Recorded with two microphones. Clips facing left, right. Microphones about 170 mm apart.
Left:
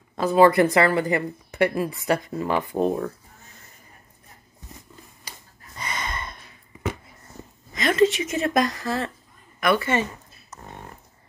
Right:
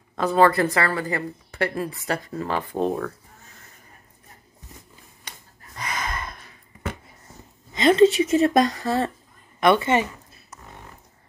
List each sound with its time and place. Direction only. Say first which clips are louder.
0.2 s a woman's voice: left 2 dB; 5° left (ahead or behind)
0.5 s a woman's voice: left 4 dB; 20° left (ahead or behind)
5.8 s a sound: right 1 dB; centre (ahead or behind)
7.7 s a woman's voice: right 4 dB; 30° right (ahead or behind)